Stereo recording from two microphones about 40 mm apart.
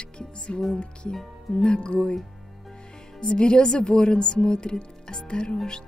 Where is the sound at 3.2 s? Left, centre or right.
Left.